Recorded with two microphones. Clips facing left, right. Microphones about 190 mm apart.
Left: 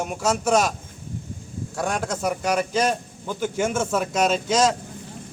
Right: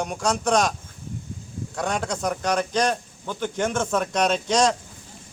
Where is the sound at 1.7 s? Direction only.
5° left (ahead or behind).